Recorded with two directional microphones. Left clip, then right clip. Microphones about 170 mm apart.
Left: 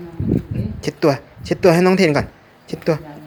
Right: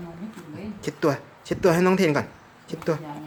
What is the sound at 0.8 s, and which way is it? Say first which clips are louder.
A woman's voice: left 7 dB; 20° left (ahead or behind).